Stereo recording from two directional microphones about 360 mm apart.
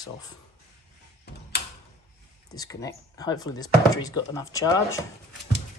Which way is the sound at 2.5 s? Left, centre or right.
Centre.